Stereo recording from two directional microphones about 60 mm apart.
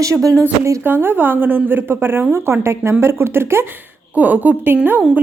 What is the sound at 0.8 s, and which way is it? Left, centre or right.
Speech, right.